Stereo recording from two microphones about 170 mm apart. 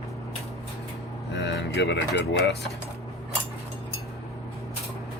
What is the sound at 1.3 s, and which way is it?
Speech, 90° left.